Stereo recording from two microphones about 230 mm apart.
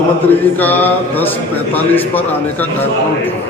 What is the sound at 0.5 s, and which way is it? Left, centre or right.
A man's voice, centre.